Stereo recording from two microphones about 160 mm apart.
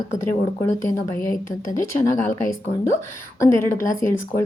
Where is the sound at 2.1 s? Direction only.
50° left (ahead or behind).